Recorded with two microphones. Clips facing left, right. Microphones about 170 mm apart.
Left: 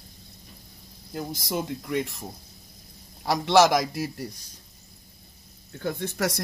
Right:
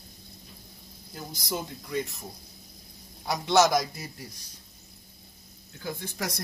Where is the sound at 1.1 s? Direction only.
70° left (ahead or behind).